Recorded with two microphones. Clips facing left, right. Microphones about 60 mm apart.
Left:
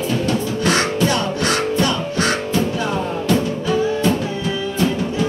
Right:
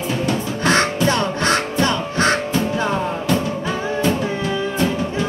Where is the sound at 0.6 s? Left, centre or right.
Right.